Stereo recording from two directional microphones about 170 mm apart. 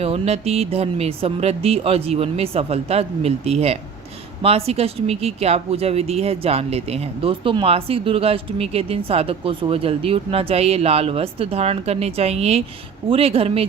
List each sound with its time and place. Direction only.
0.0 s speech: 35° right (ahead or behind)